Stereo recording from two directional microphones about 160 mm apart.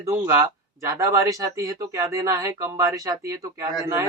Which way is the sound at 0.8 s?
20° right (ahead or behind).